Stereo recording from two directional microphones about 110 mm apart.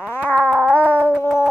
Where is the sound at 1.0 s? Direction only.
15° right (ahead or behind).